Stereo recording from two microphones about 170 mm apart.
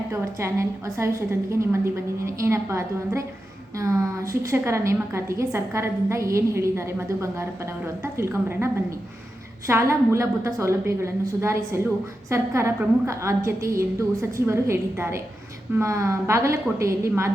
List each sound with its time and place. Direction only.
0.1 s a woman's voice: 15° right (ahead or behind)